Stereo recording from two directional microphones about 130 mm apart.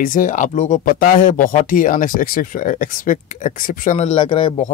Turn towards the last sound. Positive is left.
turn(degrees=45)  # may be behind; listen again after turning